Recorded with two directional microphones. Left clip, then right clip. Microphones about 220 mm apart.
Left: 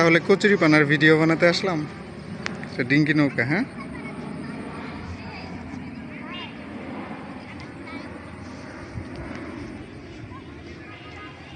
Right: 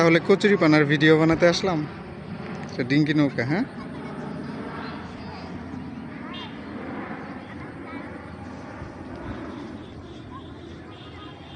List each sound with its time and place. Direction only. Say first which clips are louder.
0.0 s speech: left 1 dB; 5° right (ahead or behind)
6.9 s vehicle: right 1 dB; 40° left (ahead or behind)